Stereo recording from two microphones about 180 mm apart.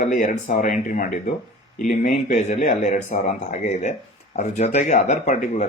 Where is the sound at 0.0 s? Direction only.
45° left (ahead or behind).